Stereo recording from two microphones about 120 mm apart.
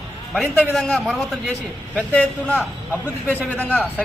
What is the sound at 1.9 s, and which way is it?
A man's voice, 10° left (ahead or behind).